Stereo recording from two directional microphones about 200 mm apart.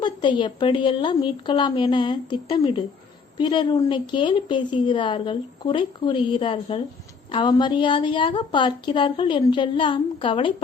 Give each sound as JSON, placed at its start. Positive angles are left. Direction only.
{"t": 0.0, "sound": "a woman's voice", "side_deg": 25}